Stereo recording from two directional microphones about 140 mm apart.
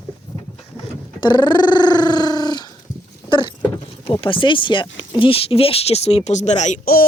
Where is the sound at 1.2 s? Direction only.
35° left (ahead or behind).